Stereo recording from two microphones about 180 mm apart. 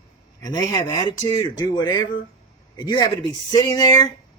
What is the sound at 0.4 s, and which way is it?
Speech, 20° left (ahead or behind).